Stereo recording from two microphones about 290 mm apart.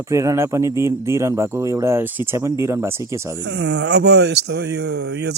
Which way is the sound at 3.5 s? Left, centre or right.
Right.